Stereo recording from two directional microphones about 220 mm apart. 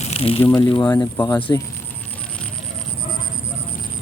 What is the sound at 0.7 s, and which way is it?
Speech, 20° left (ahead or behind).